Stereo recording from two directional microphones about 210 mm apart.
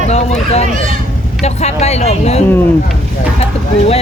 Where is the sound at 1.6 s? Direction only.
30° left (ahead or behind).